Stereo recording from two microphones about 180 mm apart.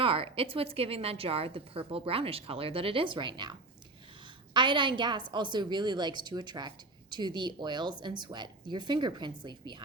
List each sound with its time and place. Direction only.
0.0 s a woman's voice: 30° right (ahead or behind)
4.5 s a woman's voice: 25° right (ahead or behind)